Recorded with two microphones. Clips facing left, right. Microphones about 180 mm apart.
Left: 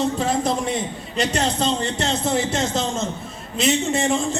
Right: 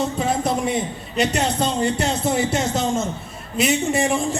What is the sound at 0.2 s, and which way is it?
A man's voice, 5° right (ahead or behind).